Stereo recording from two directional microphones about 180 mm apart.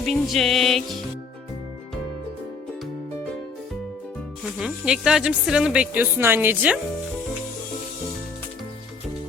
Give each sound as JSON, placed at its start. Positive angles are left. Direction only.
{"t": 0.0, "sound": "speech", "side_deg": 0}
{"t": 4.6, "sound": "speech", "side_deg": -5}